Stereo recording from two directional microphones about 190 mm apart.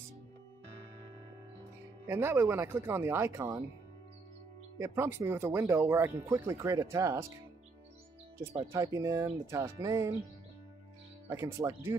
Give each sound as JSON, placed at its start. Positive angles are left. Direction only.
{"t": 2.0, "sound": "speech", "side_deg": -10}
{"t": 4.7, "sound": "speech", "side_deg": -15}
{"t": 8.7, "sound": "speech", "side_deg": -15}
{"t": 11.2, "sound": "speech", "side_deg": -15}